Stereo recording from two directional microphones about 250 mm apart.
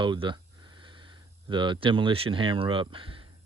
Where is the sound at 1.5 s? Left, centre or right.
Centre.